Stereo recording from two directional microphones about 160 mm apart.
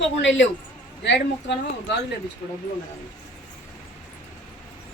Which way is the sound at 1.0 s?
90° left.